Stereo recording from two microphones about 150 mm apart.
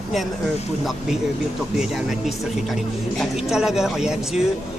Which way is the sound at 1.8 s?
Centre (ahead or behind).